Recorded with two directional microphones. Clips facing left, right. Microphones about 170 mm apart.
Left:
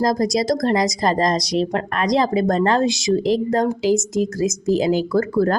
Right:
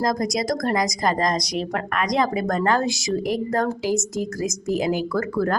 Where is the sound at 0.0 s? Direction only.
30° left (ahead or behind).